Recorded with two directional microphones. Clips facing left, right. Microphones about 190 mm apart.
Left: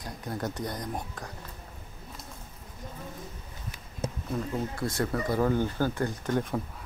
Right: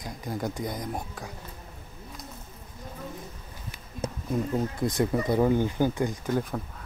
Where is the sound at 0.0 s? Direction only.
10° right (ahead or behind).